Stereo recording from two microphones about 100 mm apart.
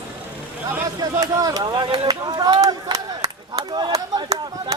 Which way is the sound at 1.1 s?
35° right (ahead or behind).